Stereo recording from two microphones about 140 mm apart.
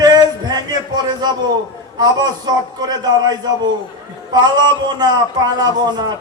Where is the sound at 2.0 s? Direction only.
30° right (ahead or behind).